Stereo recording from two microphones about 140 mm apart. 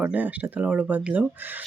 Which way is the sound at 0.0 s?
10° right (ahead or behind).